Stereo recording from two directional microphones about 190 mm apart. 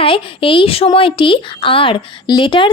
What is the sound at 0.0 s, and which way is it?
Speech, 30° left (ahead or behind).